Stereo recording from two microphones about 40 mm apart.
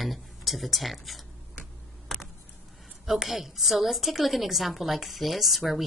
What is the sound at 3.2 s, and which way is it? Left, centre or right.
A woman's voice, centre.